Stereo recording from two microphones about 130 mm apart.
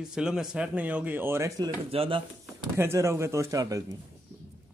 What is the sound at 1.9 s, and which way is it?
Speech, 45° right (ahead or behind).